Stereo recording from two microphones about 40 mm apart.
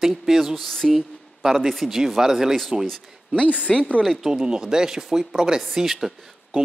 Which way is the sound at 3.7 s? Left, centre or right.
Centre.